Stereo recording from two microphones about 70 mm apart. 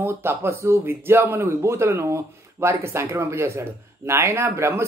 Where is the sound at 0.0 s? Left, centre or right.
Right.